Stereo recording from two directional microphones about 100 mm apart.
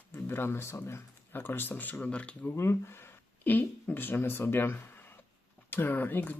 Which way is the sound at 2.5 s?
25° left (ahead or behind).